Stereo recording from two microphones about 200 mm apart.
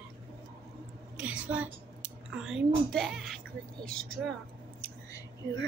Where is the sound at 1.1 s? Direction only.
5° right (ahead or behind).